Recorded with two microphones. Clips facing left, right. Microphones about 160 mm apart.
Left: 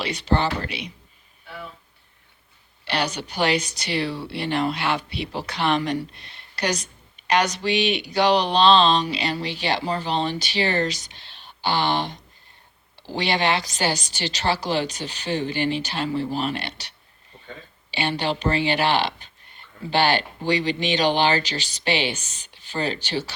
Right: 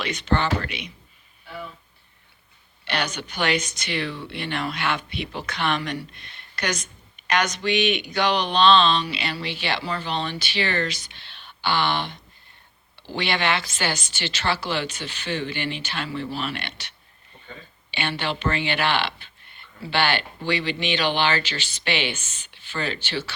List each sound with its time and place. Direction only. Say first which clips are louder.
0.0 s speech: left 1 dB; 35° left (ahead or behind)
2.8 s speech: left 2 dB; 35° left (ahead or behind)
17.9 s speech: left 3 dB; 35° left (ahead or behind)